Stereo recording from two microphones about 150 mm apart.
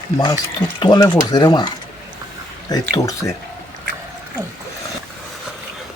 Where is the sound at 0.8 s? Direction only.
30° left (ahead or behind).